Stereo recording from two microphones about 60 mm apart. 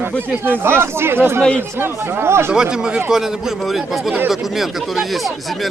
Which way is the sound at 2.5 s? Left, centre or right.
Centre.